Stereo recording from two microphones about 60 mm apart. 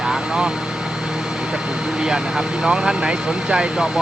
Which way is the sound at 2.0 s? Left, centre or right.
Centre.